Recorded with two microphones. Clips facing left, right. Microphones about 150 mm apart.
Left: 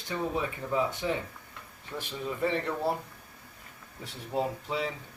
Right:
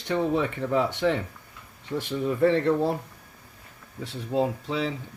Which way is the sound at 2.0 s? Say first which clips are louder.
Right 8 dB; 65° right (ahead or behind).